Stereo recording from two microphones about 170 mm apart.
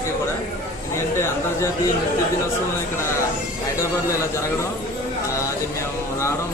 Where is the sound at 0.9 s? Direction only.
15° left (ahead or behind).